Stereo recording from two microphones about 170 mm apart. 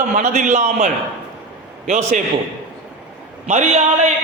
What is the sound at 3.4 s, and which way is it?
Speech, 40° right (ahead or behind).